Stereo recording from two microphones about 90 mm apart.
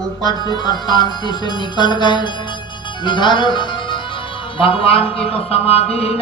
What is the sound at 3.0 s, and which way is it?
Speech, 60° left (ahead or behind).